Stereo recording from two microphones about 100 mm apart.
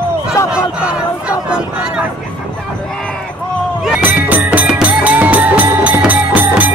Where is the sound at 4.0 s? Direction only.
20° right (ahead or behind).